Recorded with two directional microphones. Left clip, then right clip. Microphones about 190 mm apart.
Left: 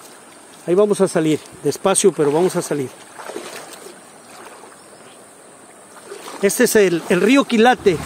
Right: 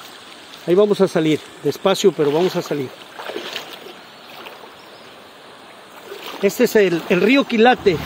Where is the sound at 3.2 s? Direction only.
Centre (ahead or behind).